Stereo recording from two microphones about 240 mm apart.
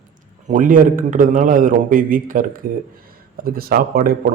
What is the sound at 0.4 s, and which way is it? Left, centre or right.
Speech, right.